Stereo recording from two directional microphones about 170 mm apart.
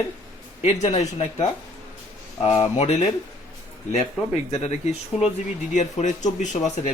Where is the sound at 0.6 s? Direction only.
40° left (ahead or behind).